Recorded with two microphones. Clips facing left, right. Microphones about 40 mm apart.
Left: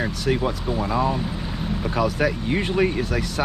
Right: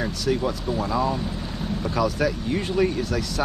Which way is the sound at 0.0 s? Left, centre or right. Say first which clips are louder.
Left 1 dB; left.